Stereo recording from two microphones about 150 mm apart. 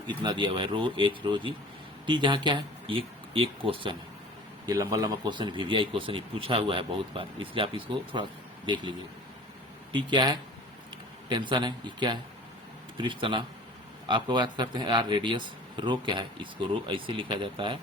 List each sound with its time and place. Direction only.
0.2 s speech: 30° right (ahead or behind)
4.6 s speech: 25° right (ahead or behind)